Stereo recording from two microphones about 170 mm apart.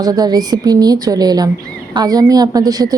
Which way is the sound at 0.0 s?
20° right (ahead or behind).